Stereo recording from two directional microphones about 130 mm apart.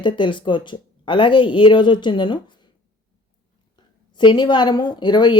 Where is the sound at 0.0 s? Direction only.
40° left (ahead or behind).